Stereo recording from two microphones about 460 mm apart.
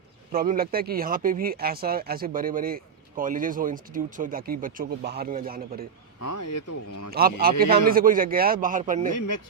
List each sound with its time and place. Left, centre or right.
0.3 s speech: centre
6.1 s speech: left
7.1 s a man's voice: centre
9.1 s speech: left